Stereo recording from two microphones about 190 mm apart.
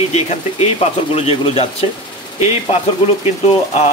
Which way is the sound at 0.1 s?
35° left (ahead or behind).